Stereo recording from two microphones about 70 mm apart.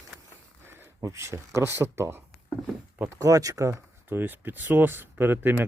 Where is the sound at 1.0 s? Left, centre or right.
Right.